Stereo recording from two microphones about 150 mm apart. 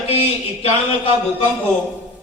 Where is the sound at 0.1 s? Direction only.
40° left (ahead or behind).